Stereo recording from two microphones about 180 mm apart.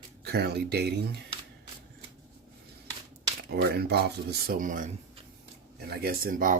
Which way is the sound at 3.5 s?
60° right (ahead or behind).